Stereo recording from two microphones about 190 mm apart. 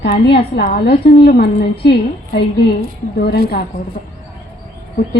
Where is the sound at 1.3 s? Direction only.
55° left (ahead or behind).